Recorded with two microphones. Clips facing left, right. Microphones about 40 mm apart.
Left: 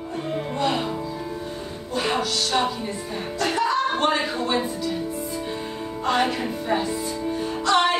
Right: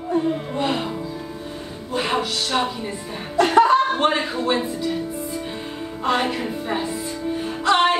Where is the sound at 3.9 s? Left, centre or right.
Centre.